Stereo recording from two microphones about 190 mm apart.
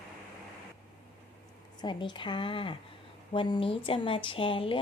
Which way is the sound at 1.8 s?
25° left (ahead or behind).